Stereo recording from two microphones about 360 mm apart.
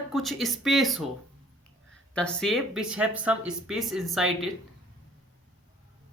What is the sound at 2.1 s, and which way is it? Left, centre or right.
Speech, centre.